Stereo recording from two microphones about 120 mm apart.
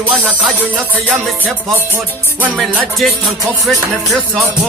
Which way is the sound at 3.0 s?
Centre (ahead or behind).